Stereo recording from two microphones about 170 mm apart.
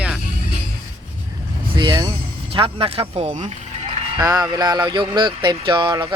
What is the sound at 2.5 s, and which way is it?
Speech, 30° right (ahead or behind).